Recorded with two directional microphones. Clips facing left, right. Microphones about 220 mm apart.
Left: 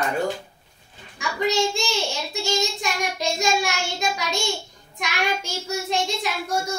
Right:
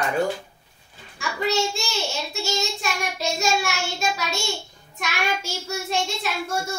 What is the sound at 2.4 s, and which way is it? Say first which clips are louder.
Child singing: left 3 dB; 15° left (ahead or behind).